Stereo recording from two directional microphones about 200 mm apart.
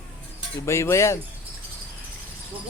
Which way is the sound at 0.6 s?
15° left (ahead or behind).